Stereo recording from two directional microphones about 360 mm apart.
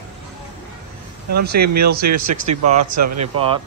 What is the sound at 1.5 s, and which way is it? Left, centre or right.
Speech, right.